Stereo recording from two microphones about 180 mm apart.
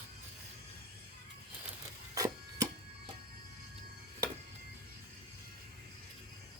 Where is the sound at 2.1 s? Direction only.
20° right (ahead or behind).